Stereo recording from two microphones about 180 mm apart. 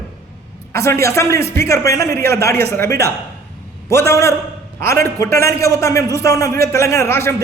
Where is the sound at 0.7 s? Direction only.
15° left (ahead or behind).